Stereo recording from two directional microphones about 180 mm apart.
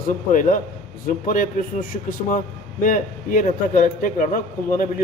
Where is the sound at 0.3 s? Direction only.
50° left (ahead or behind).